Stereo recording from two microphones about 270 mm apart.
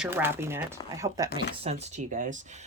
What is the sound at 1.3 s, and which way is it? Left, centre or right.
Speech, right.